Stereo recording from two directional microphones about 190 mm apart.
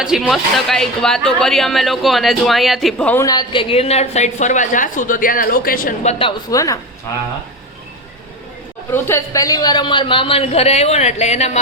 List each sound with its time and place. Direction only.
0.0 s a woman's voice: centre (ahead or behind)
3.2 s a woman's voice: 25° left (ahead or behind); by 6.1 s 50° left (ahead or behind)
6.1 s a man's voice: 30° left (ahead or behind)
8.9 s a man's voice: 15° left (ahead or behind); by 11.6 s 35° left (ahead or behind)